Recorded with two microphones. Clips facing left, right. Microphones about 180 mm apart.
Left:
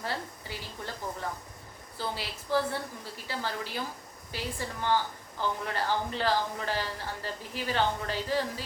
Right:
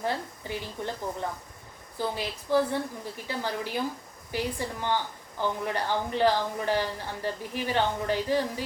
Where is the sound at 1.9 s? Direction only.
15° right (ahead or behind).